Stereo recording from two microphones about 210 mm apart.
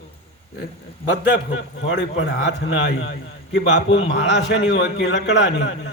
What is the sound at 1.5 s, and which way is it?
A man's voice, 60° left (ahead or behind).